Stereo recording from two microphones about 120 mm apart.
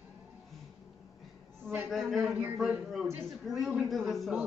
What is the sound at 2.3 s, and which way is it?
Speech, 15° right (ahead or behind).